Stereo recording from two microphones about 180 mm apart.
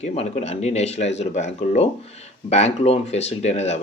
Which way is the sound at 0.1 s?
35° left (ahead or behind).